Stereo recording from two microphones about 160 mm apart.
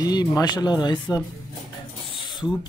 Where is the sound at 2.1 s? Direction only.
30° left (ahead or behind).